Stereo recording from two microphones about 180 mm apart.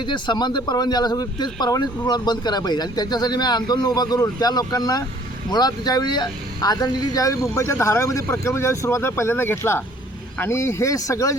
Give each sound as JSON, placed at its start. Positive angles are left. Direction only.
{"t": 0.0, "sound": "speech", "side_deg": 25}